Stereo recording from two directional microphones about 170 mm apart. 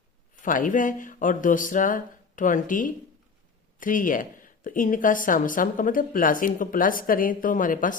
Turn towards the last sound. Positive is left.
turn(degrees=50)  # may be behind; listen again after turning